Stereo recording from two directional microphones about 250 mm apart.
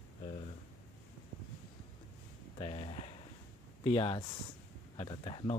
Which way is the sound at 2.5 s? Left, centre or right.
Left.